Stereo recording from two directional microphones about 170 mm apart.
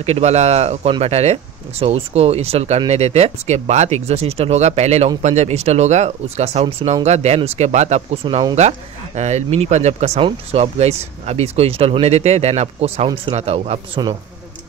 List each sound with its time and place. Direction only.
0.0 s speech: 40° right (ahead or behind)